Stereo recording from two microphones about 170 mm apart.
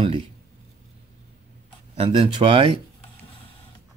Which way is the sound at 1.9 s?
30° right (ahead or behind).